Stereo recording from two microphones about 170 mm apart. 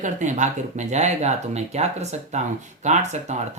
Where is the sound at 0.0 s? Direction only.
45° right (ahead or behind).